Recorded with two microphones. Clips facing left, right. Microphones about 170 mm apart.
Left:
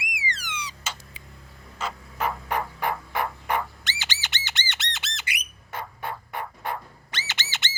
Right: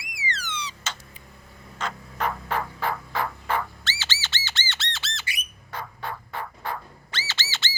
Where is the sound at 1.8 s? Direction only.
5° left (ahead or behind).